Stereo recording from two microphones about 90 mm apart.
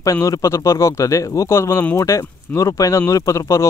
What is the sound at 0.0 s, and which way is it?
Speech, 35° left (ahead or behind).